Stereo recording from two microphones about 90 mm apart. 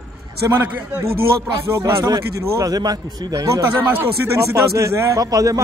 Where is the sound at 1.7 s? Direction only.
30° right (ahead or behind).